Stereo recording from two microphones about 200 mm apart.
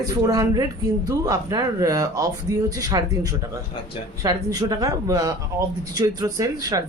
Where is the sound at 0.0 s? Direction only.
20° right (ahead or behind).